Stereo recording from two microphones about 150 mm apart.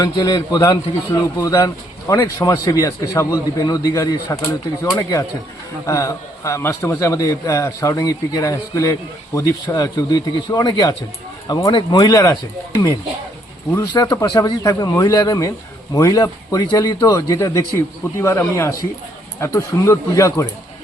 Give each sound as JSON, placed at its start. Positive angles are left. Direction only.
{"t": 0.0, "sound": "a man's voice", "side_deg": 25}